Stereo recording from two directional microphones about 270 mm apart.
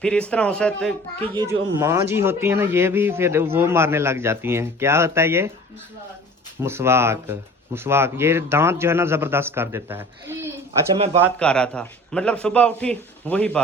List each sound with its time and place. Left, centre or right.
0.0 s a man's voice: centre
1.2 s speech: centre
6.6 s speech: centre
10.9 s speech: right
11.3 s a man's voice: centre